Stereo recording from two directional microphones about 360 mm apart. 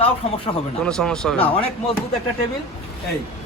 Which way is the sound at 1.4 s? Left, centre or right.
Centre.